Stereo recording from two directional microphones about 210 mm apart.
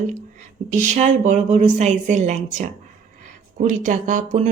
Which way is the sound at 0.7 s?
35° right (ahead or behind).